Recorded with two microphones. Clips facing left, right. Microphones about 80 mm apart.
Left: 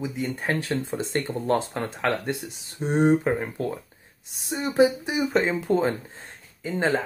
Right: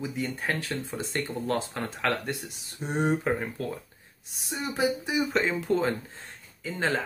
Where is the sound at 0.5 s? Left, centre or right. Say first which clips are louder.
Left 5 dB; left.